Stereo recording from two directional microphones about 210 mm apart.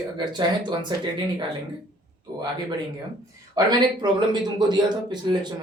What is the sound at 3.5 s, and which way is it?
Speech, 20° right (ahead or behind).